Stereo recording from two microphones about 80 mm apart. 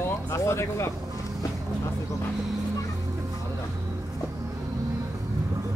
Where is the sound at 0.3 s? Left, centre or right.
Left.